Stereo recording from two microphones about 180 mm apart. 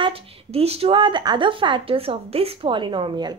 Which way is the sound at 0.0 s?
30° right (ahead or behind).